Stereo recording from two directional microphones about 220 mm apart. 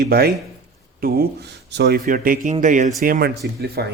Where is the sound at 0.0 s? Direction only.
45° right (ahead or behind).